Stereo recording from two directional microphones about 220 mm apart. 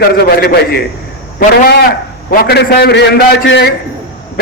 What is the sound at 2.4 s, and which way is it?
A man's voice, 45° left (ahead or behind).